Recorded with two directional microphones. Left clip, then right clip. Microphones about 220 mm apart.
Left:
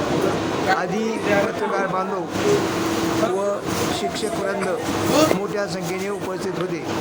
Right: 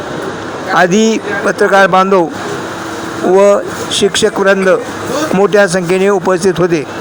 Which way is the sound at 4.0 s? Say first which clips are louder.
Right 13 dB; 35° right (ahead or behind).